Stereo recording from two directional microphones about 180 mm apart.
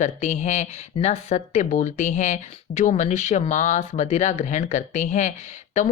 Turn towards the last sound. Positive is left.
turn(degrees=40)  # may be behind; listen again after turning